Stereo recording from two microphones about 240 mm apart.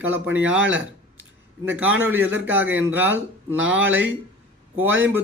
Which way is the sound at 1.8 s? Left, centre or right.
Right.